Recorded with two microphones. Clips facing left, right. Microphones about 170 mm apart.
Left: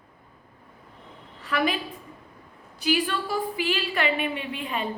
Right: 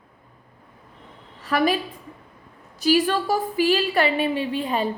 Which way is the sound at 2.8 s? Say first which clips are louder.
Right 6 dB; 40° right (ahead or behind).